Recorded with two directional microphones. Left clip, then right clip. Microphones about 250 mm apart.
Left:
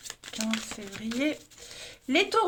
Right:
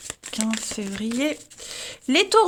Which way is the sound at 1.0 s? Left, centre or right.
Right.